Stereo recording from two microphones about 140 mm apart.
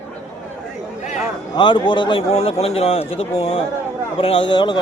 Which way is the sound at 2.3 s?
45° left (ahead or behind).